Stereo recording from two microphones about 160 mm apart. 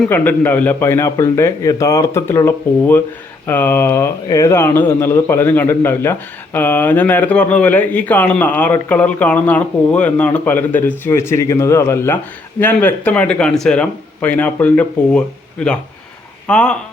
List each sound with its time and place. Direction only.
0.0 s speech: 10° left (ahead or behind)